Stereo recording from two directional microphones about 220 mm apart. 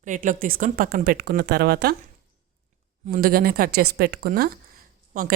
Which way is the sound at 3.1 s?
40° right (ahead or behind).